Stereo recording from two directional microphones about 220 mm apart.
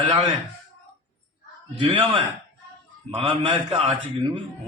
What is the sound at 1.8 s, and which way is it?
A man's voice, 25° right (ahead or behind).